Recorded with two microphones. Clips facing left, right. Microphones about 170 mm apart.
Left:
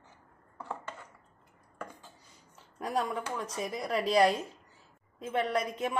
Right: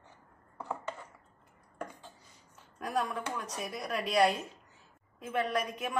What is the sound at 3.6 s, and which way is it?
Speech, 30° left (ahead or behind).